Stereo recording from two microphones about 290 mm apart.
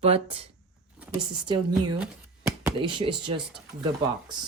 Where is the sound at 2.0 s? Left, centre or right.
Centre.